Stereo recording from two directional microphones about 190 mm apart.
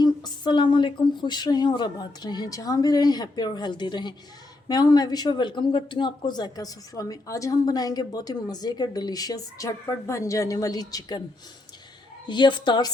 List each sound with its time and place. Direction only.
0.0 s speech: 25° left (ahead or behind)
12.3 s speech: 25° left (ahead or behind)